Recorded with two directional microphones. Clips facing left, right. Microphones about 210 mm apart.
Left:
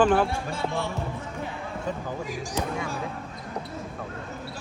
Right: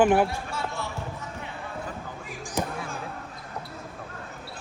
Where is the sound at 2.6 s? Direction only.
Centre (ahead or behind).